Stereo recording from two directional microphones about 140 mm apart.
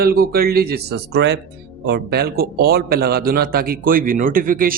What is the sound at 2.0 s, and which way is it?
Speech, 90° right.